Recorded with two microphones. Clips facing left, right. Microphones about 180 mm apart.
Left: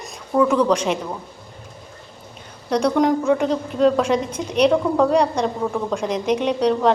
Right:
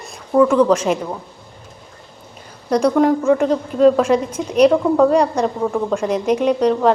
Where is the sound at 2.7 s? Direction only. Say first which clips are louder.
Right 3 dB; 10° right (ahead or behind).